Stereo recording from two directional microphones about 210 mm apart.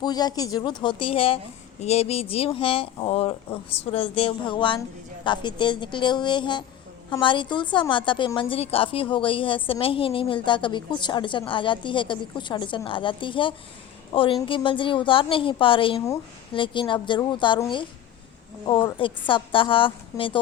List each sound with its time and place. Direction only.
0.0 s a woman's voice: 20° left (ahead or behind)